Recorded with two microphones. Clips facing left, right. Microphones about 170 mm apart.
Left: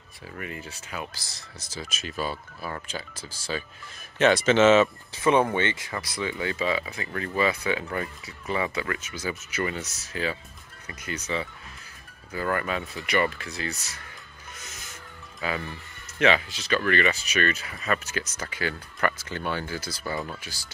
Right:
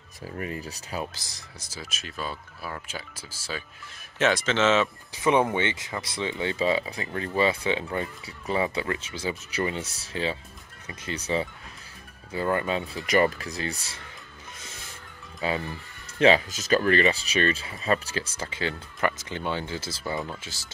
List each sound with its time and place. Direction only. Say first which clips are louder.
0.4 s speech: right 3 dB; 35° right (ahead or behind)
1.1 s speech: left 1 dB; 15° right (ahead or behind); by 4.8 s 10° left (ahead or behind)
5.1 s speech: even; 15° right (ahead or behind); by 14.0 s 30° right (ahead or behind)
15.4 s speech: right 2 dB; 30° right (ahead or behind)